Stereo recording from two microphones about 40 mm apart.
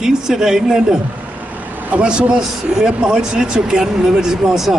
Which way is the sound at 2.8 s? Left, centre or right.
Centre.